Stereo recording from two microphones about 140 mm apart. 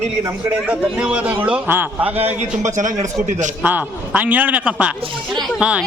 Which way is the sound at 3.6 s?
10° right (ahead or behind).